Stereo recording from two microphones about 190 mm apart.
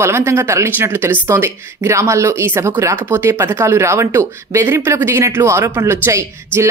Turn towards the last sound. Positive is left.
turn(degrees=-15)  # may be behind; listen again after turning